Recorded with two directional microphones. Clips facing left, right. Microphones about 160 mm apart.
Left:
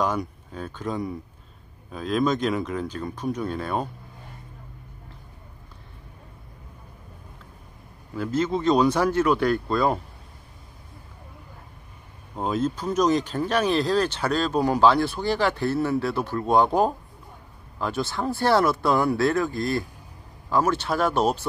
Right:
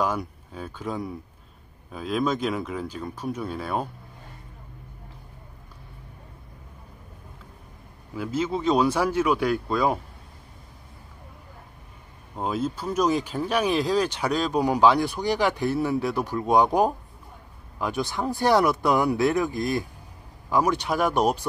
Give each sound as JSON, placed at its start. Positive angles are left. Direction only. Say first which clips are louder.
{"t": 0.0, "sound": "speech", "louder": "left 1 dB", "side_deg": -5}
{"t": 8.1, "sound": "speech", "louder": "left 2 dB", "side_deg": -10}
{"t": 12.4, "sound": "speech", "louder": "left 2 dB", "side_deg": -5}